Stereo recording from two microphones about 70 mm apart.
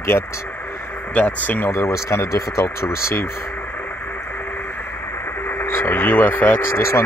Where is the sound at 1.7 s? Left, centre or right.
Left.